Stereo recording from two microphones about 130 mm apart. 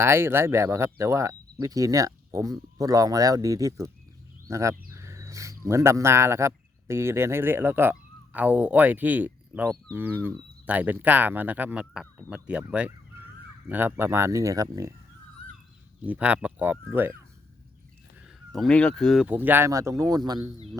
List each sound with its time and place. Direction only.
0.0 s speech: 20° right (ahead or behind)
16.0 s speech: 10° right (ahead or behind)
18.5 s speech: 5° left (ahead or behind)
19.3 s speech: 15° right (ahead or behind); by 20.6 s 30° right (ahead or behind)